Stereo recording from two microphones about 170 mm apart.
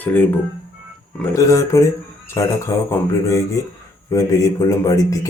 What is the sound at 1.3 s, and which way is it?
Speech, 20° left (ahead or behind).